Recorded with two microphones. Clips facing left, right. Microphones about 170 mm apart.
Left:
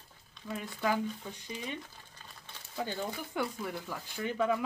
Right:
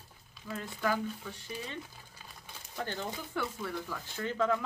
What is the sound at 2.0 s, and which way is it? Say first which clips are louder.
Crumpling: right 1 dB; 10° right (ahead or behind).